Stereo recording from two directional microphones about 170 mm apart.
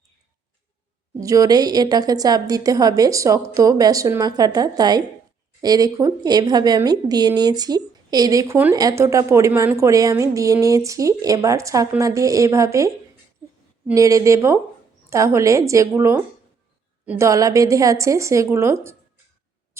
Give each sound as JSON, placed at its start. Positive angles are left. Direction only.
{"t": 1.2, "sound": "a woman's voice", "side_deg": -20}
{"t": 13.9, "sound": "a woman's voice", "side_deg": -20}